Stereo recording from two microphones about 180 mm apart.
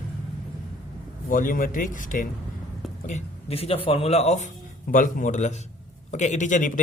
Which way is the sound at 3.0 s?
35° left (ahead or behind).